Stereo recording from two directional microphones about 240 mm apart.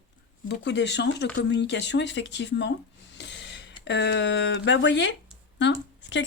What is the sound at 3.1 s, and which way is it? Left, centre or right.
Snort, left.